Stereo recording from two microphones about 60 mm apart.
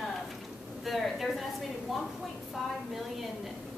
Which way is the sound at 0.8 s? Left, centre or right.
Centre.